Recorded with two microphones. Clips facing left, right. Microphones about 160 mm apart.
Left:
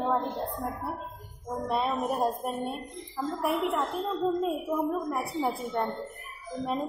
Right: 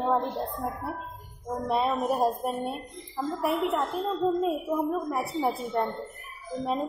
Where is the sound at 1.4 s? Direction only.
Centre (ahead or behind).